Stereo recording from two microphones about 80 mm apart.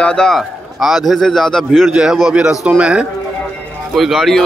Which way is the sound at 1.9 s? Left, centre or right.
Centre.